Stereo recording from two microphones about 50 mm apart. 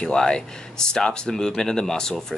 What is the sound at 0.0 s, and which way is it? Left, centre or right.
Speech, centre.